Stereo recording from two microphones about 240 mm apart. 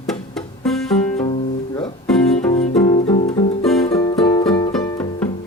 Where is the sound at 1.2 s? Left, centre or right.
Centre.